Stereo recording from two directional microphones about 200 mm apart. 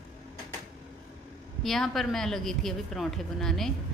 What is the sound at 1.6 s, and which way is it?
A woman's voice, centre (ahead or behind).